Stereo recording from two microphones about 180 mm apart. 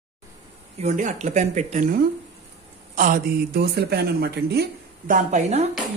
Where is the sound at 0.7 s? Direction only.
40° right (ahead or behind).